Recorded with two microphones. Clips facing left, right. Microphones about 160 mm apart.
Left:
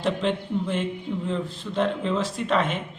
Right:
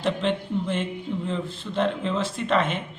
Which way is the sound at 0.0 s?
5° left (ahead or behind).